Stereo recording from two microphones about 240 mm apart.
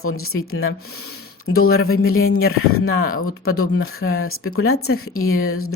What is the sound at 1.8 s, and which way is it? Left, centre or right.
Speech, left.